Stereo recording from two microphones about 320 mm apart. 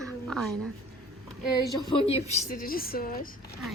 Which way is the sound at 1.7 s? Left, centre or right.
Centre.